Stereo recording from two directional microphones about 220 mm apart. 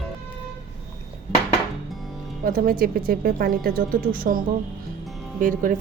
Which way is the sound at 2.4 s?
40° right (ahead or behind).